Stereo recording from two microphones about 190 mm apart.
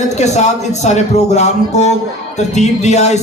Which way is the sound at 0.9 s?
35° left (ahead or behind).